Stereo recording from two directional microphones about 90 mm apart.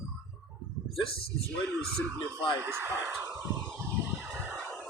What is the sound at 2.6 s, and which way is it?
Speech, 25° right (ahead or behind).